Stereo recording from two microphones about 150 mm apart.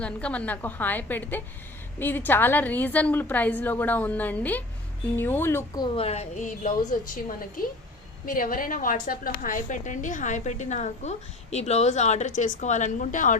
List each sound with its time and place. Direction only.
0.0 s a woman's voice: 10° left (ahead or behind)
5.7 s speech: 30° left (ahead or behind); by 6.7 s 55° left (ahead or behind)
7.6 s a woman's voice: 75° left (ahead or behind); by 13.3 s 60° left (ahead or behind)